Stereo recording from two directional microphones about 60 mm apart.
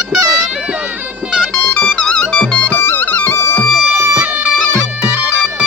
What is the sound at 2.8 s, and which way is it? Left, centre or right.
Music, left.